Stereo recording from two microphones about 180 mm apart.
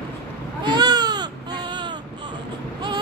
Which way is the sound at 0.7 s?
20° right (ahead or behind).